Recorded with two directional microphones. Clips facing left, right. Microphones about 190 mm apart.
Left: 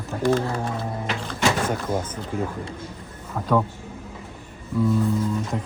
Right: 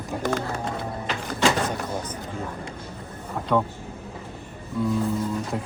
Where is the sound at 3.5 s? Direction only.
Centre (ahead or behind).